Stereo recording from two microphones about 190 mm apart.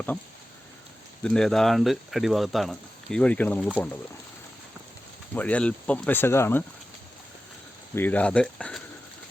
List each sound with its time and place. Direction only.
1.2 s speech: 5° left (ahead or behind)
5.3 s speech: 5° left (ahead or behind)
7.9 s speech: 10° left (ahead or behind)